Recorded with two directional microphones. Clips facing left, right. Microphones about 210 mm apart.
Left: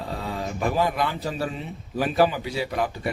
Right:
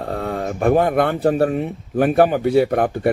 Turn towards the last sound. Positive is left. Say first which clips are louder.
# right 9 dB
turn(degrees=-55)  # may be behind; listen again after turning